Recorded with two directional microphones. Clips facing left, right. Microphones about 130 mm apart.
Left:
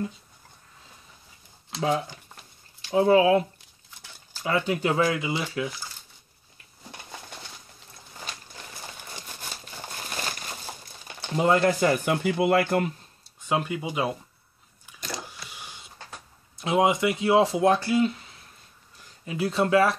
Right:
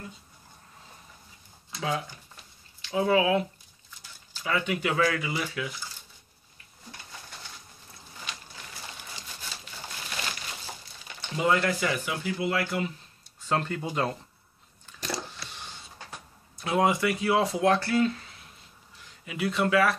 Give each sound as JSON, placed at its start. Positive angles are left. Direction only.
{"t": 2.9, "sound": "speech", "side_deg": 30}
{"t": 11.1, "sound": "speech", "side_deg": 35}
{"t": 13.5, "sound": "speech", "side_deg": 10}
{"t": 14.9, "sound": "biting", "side_deg": 10}
{"t": 16.5, "sound": "speech", "side_deg": 20}
{"t": 19.2, "sound": "speech", "side_deg": 30}